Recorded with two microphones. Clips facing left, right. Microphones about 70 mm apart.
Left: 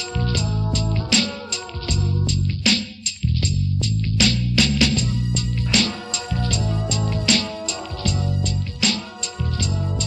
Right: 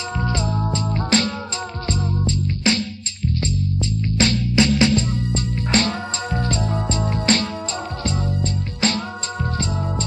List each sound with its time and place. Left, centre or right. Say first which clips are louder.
0.2 s music: right 2 dB; right